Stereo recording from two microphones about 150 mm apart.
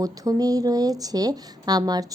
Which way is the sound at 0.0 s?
25° right (ahead or behind).